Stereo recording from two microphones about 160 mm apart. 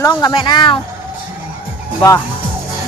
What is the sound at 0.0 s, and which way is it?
Speech, 25° left (ahead or behind).